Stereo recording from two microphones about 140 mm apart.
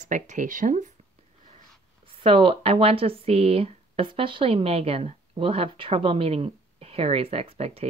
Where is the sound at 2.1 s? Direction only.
40° right (ahead or behind).